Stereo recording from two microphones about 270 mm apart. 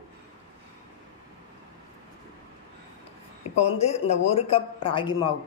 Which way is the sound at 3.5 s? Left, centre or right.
Left.